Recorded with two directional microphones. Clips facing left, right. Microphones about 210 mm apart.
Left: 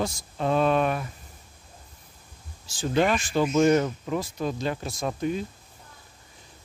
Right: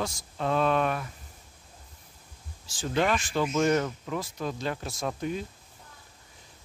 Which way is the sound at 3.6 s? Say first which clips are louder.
Left 4 dB; 15° left (ahead or behind).